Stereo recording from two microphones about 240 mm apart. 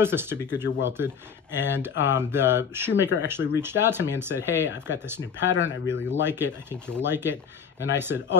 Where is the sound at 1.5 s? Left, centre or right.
Centre.